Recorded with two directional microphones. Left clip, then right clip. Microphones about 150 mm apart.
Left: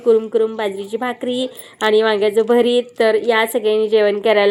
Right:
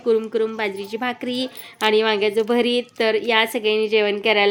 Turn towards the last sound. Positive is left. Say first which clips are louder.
# left 4 dB
turn(degrees=-5)  # may be behind; listen again after turning